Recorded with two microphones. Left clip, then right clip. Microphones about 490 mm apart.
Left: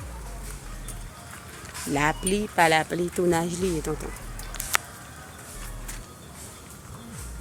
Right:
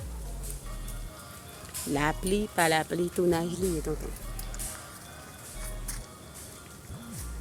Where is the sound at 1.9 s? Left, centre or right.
Right.